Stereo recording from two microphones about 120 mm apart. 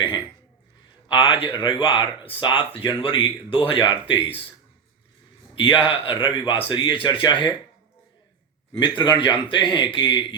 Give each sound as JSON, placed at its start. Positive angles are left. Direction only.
{"t": 1.0, "sound": "a man's voice", "side_deg": 45}
{"t": 5.5, "sound": "speech", "side_deg": 45}
{"t": 9.0, "sound": "speech", "side_deg": 40}